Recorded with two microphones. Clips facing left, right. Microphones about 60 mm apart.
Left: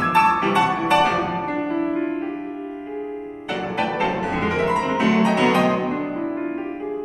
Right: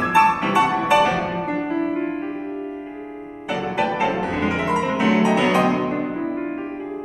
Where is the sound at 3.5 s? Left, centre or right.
Centre.